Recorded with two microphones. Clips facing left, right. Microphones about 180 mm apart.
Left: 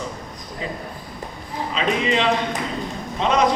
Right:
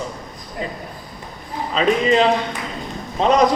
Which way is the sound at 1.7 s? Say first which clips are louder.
Right 5 dB; 40° right (ahead or behind).